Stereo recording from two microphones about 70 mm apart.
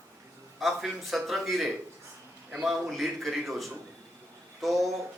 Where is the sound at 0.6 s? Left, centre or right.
Centre.